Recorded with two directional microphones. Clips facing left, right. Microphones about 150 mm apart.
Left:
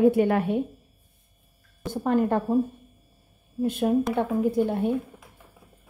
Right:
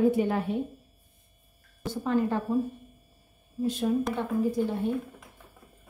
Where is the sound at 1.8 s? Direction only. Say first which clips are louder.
Left 3 dB; 55° left (ahead or behind).